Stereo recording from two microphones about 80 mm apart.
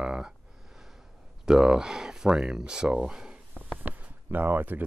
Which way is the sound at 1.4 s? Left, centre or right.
Centre.